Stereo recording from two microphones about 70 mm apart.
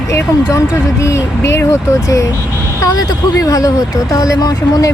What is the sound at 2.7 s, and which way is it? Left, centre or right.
Speech, left.